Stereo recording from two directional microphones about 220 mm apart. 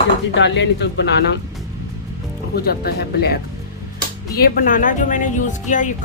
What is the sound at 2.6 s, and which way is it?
Speech, 45° left (ahead or behind).